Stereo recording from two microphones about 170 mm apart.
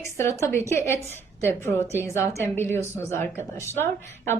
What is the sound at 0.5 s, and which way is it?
A woman's voice, 15° left (ahead or behind).